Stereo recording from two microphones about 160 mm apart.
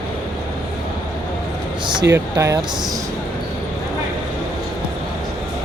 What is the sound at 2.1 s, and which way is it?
Speech, 20° right (ahead or behind).